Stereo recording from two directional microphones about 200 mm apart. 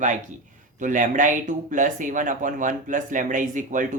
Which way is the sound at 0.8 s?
40° right (ahead or behind).